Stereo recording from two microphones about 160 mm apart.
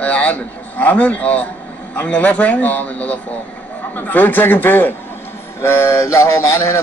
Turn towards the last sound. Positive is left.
turn(degrees=20)  # may be behind; listen again after turning